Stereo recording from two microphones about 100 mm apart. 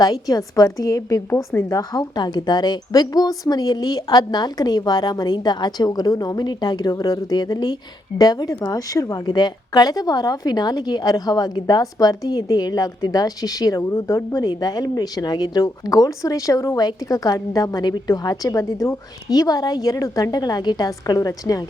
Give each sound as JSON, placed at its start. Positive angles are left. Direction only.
{"t": 0.0, "sound": "speech", "side_deg": 40}